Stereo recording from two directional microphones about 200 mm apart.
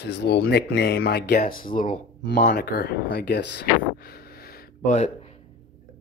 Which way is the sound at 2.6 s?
55° left (ahead or behind).